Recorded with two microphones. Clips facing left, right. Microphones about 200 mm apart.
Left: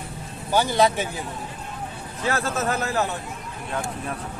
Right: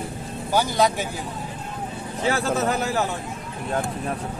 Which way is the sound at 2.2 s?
15° right (ahead or behind).